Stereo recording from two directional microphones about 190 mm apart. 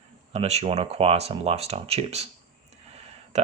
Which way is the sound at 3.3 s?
35° right (ahead or behind).